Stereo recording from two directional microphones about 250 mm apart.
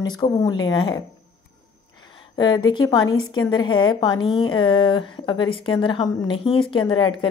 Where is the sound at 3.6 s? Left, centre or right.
Centre.